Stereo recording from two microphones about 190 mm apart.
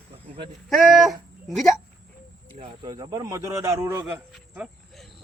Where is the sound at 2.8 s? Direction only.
20° right (ahead or behind).